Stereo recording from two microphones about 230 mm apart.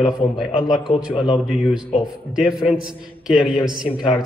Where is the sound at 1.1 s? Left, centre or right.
Left.